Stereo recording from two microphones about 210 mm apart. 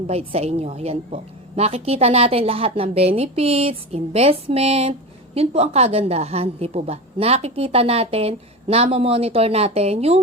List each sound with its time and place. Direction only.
0.1 s a woman's voice: 30° right (ahead or behind)